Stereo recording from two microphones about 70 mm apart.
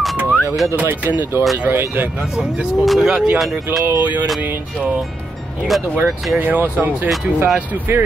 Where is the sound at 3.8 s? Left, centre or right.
Right.